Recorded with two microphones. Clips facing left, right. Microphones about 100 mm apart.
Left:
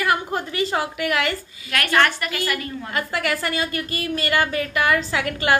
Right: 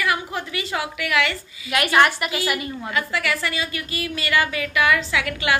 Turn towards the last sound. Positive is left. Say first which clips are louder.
# left 1 dB
turn(degrees=40)  # may be behind; listen again after turning